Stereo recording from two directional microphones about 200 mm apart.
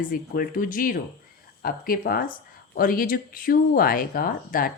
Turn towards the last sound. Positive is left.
turn(degrees=45)  # may be behind; listen again after turning